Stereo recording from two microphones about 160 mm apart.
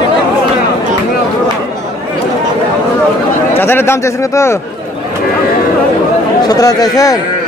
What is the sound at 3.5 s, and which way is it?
Speech, 15° left (ahead or behind).